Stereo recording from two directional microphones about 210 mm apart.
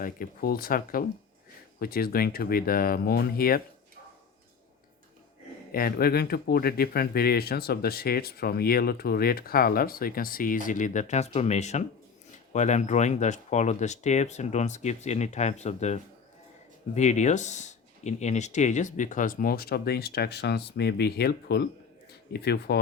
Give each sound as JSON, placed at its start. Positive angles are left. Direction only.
{"t": 0.0, "sound": "speech", "side_deg": 45}
{"t": 5.7, "sound": "speech", "side_deg": 45}